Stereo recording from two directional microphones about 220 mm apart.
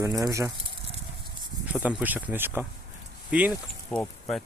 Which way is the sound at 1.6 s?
5° right (ahead or behind).